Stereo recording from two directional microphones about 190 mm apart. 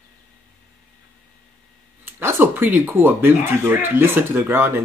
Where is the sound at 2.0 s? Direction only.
10° right (ahead or behind).